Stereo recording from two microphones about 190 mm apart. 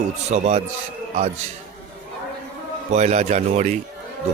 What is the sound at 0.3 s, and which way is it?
Speech, 35° right (ahead or behind).